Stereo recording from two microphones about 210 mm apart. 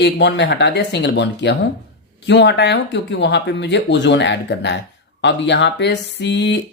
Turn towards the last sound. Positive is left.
turn(degrees=55)  # may be behind; listen again after turning